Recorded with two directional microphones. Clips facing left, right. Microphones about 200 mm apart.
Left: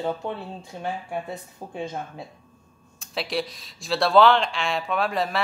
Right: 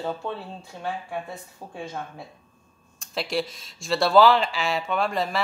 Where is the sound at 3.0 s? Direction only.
Centre (ahead or behind).